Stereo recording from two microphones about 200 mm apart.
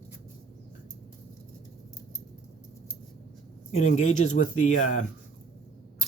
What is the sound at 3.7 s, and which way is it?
Speech, 35° left (ahead or behind).